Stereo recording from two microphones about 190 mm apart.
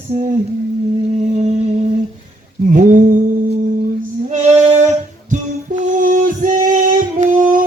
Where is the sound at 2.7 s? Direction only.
45° right (ahead or behind).